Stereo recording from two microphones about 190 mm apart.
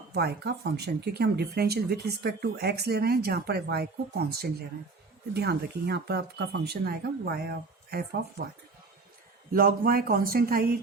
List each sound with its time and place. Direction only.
0.1 s speech: 60° right (ahead or behind)
9.5 s speech: 50° right (ahead or behind)